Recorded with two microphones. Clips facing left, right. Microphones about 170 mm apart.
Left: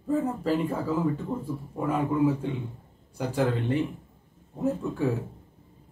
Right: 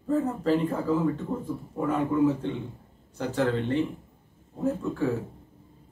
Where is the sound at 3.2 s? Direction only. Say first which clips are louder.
Even; 10° left (ahead or behind).